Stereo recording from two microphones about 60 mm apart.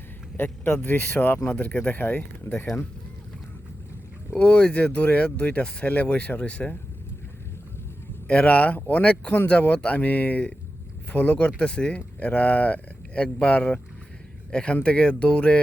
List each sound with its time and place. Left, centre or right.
0.3 s speech: left
4.4 s speech: left
8.3 s speech: left